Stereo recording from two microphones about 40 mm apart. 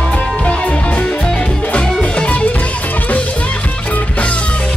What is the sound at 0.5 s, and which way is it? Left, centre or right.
Music, left.